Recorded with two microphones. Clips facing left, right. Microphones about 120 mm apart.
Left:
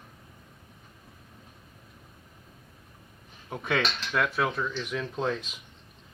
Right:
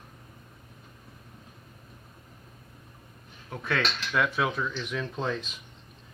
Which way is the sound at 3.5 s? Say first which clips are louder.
Left 2 dB; 15° left (ahead or behind).